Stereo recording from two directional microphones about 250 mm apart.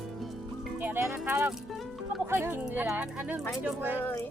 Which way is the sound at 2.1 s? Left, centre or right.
Centre.